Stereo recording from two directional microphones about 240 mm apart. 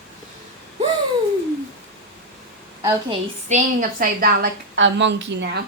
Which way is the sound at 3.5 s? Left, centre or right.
Right.